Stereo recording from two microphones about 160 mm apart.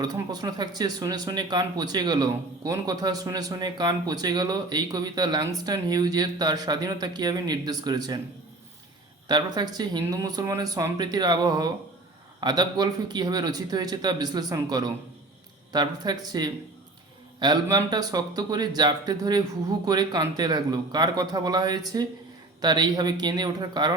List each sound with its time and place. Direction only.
0.0 s speech: 25° right (ahead or behind)
9.2 s speech: 25° right (ahead or behind)